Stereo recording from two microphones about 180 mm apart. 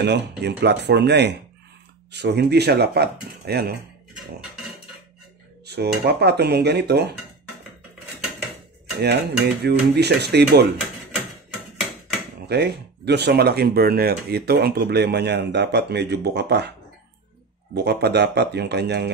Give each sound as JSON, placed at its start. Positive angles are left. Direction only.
{"t": 0.0, "sound": "dishes", "side_deg": -70}
{"t": 2.1, "sound": "speech", "side_deg": -70}
{"t": 5.7, "sound": "speech", "side_deg": -65}
{"t": 9.0, "sound": "dishes", "side_deg": -65}
{"t": 12.4, "sound": "speech", "side_deg": -65}
{"t": 17.8, "sound": "dishes", "side_deg": -65}